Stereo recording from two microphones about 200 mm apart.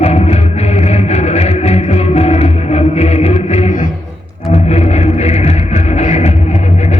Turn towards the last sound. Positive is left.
turn(degrees=35)  # may be behind; listen again after turning